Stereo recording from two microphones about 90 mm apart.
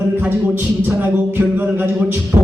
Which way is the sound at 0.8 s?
20° right (ahead or behind).